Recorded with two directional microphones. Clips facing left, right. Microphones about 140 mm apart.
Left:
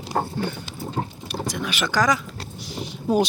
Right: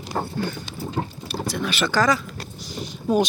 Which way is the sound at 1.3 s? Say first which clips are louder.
Right 2 dB; 15° left (ahead or behind).